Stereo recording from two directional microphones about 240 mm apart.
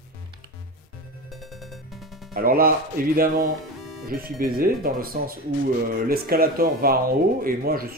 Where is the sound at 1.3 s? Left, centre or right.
Centre.